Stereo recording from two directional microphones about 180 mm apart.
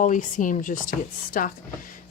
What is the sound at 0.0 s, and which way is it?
A woman's voice, 45° left (ahead or behind).